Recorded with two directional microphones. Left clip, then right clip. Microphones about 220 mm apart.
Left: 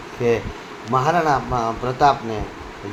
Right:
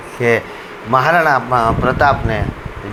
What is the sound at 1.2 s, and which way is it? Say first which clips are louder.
Speech: right 7 dB; 35° right (ahead or behind).